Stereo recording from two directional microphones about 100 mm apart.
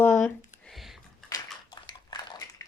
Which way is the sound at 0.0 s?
20° left (ahead or behind).